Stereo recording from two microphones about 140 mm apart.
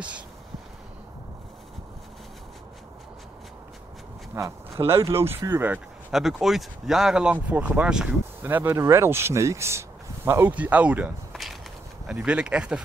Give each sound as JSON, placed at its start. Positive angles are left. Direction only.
{"t": 4.4, "sound": "speech", "side_deg": -25}
{"t": 6.1, "sound": "speech", "side_deg": 0}